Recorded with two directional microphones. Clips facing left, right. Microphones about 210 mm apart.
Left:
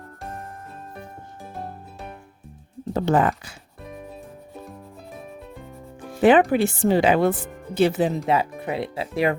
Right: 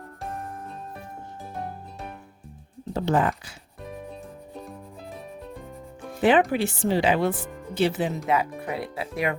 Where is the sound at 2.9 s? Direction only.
55° left (ahead or behind).